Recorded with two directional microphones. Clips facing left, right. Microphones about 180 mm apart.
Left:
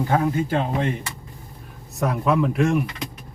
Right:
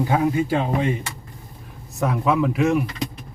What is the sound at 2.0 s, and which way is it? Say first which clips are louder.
Speech: even; centre (ahead or behind).